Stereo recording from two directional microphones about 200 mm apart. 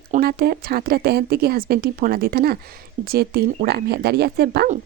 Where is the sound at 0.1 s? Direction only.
50° right (ahead or behind).